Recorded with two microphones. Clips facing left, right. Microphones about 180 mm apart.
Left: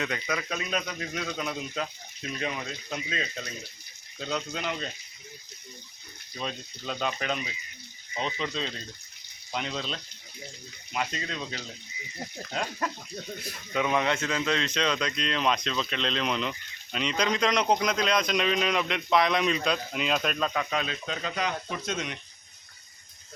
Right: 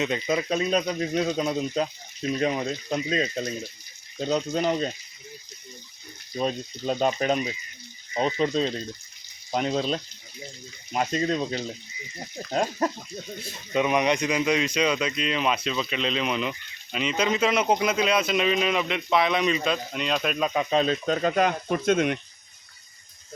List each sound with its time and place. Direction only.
0.0 s speech: 25° right (ahead or behind)
6.3 s speech: 40° right (ahead or behind)
13.4 s speech: 20° right (ahead or behind); by 20.5 s 5° right (ahead or behind)
20.5 s speech: 25° right (ahead or behind); by 22.2 s 55° right (ahead or behind)